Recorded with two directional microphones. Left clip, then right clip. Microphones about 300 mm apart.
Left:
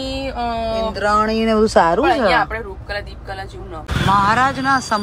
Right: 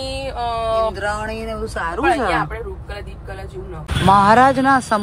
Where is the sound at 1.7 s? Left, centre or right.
Centre.